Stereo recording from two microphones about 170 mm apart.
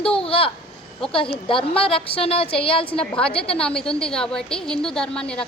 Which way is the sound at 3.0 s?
5° left (ahead or behind).